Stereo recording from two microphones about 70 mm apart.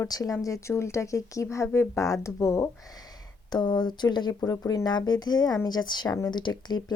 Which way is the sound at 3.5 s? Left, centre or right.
Left.